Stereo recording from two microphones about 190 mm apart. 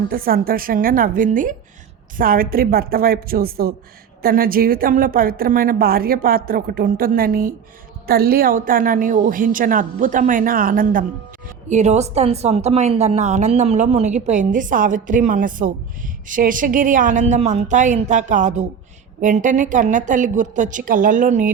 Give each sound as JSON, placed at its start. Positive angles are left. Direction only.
{"t": 0.1, "sound": "a woman's voice", "side_deg": -50}